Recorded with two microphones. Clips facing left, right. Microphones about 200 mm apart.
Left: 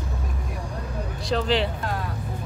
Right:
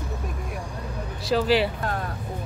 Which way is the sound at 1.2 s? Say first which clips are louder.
Right 3 dB; 5° right (ahead or behind).